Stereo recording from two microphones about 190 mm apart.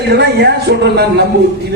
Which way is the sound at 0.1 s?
60° right (ahead or behind).